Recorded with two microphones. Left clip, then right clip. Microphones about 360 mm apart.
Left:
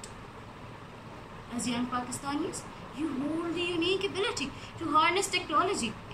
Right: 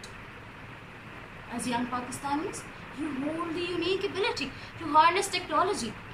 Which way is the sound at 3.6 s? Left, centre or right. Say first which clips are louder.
Left 1 dB; right.